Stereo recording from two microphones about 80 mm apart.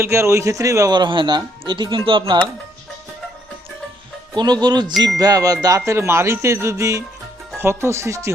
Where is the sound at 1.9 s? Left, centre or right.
Right.